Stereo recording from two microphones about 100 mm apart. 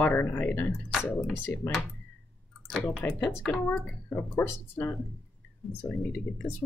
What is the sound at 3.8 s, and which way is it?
Speech, 15° left (ahead or behind).